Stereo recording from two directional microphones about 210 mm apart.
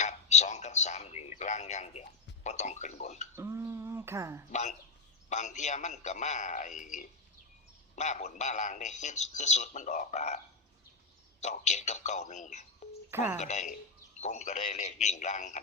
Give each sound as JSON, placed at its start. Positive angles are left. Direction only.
{"t": 0.0, "sound": "speech", "side_deg": 35}
{"t": 3.3, "sound": "a sound", "side_deg": -15}
{"t": 4.5, "sound": "a man's voice", "side_deg": 35}
{"t": 13.1, "sound": "speech", "side_deg": -10}
{"t": 13.4, "sound": "a man's voice", "side_deg": 35}